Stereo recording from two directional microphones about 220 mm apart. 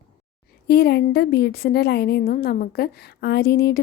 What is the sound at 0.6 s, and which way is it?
A woman's voice, 45° left (ahead or behind).